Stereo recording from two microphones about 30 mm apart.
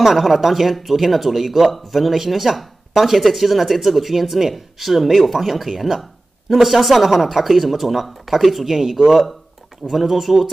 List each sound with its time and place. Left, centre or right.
0.0 s speech: centre